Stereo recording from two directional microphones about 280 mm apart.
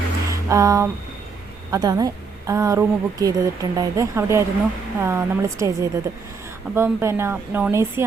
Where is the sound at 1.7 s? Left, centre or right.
Centre.